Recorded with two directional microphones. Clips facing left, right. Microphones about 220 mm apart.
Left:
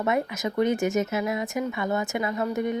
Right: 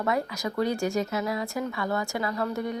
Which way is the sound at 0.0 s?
20° left (ahead or behind).